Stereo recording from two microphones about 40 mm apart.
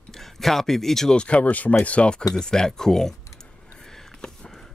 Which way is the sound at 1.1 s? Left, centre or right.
Left.